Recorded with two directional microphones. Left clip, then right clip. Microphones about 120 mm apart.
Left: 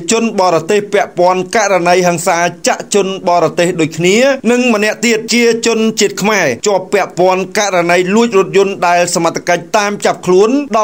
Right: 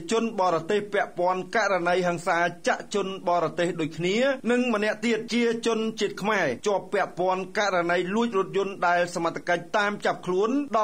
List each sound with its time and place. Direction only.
0.1 s a man's voice: 30° left (ahead or behind)
4.8 s a man's voice: 40° left (ahead or behind)